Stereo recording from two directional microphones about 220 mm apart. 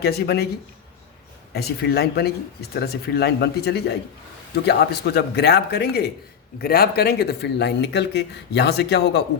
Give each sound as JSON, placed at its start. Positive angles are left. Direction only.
{"t": 0.0, "sound": "speech", "side_deg": 45}
{"t": 1.5, "sound": "speech", "side_deg": 45}